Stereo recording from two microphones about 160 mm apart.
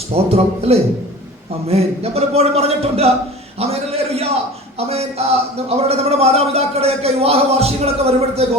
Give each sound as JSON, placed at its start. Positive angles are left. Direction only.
{"t": 0.1, "sound": "speech", "side_deg": -40}